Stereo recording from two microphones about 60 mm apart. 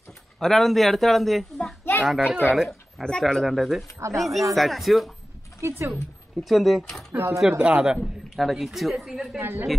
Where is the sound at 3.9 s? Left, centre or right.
Right.